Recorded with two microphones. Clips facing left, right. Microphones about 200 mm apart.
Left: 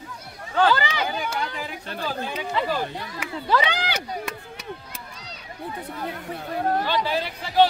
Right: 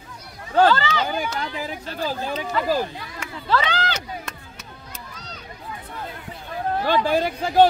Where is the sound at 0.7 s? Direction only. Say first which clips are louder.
Right 2 dB; 10° left (ahead or behind).